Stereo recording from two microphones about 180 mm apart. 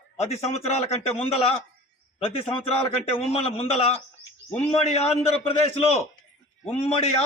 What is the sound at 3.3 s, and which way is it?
A man's voice, 35° left (ahead or behind).